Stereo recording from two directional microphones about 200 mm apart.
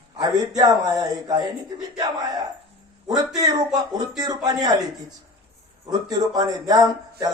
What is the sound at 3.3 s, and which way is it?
A man's voice, 20° right (ahead or behind).